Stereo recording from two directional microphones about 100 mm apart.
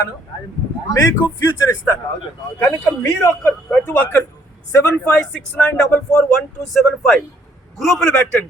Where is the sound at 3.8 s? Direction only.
20° left (ahead or behind).